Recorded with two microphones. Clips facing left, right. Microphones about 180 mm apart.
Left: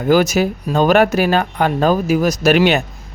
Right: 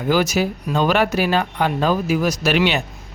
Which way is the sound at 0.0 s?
50° left (ahead or behind).